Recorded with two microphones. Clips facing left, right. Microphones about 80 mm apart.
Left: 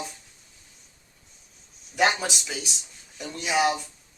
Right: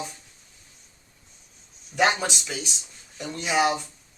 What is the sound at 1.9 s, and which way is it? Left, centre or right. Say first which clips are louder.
Speech: right 1 dB; centre.